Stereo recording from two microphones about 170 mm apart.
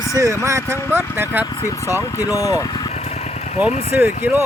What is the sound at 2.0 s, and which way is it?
Speech, 20° left (ahead or behind).